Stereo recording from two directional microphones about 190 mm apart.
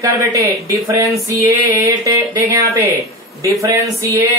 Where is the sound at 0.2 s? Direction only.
15° right (ahead or behind).